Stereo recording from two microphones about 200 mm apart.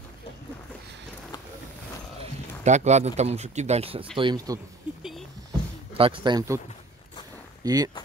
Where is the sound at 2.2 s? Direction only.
35° right (ahead or behind); by 4.6 s 20° right (ahead or behind).